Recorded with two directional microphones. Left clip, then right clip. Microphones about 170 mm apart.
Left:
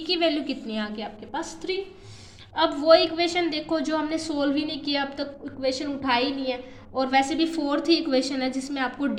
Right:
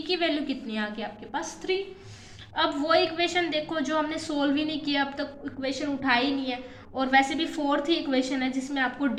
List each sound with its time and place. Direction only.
0.1 s a woman's voice: 25° left (ahead or behind)